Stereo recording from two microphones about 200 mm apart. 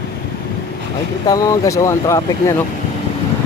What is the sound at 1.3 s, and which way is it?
Speech, 15° left (ahead or behind).